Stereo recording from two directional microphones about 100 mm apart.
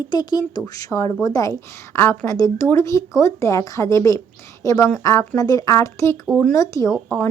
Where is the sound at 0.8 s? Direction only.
30° left (ahead or behind).